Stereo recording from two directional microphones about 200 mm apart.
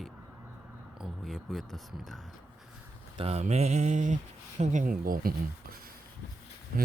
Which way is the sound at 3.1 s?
30° right (ahead or behind).